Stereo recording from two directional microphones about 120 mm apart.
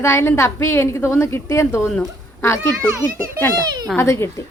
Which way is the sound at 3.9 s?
20° left (ahead or behind).